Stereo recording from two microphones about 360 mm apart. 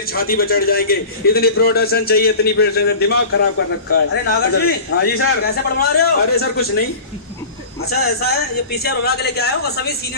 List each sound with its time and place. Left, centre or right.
0.0 s a man's voice: left
8.7 s a man's voice: left